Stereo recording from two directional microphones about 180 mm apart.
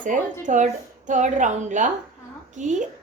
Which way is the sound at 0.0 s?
45° right (ahead or behind).